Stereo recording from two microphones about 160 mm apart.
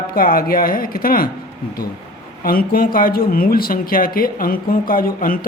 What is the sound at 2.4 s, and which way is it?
Speech, 65° left (ahead or behind).